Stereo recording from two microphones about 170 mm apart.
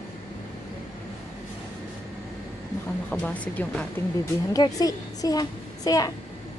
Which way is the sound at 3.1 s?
10° left (ahead or behind).